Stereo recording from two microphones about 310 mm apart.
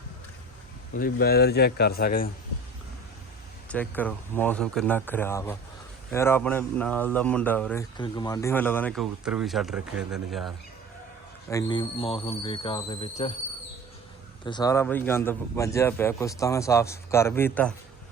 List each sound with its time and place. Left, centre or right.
0.9 s a man's voice: left
3.7 s a man's voice: centre
11.5 s a man's voice: centre
14.4 s a man's voice: centre